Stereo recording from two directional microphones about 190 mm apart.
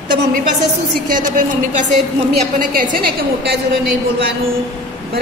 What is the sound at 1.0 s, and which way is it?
Speech, 45° right (ahead or behind).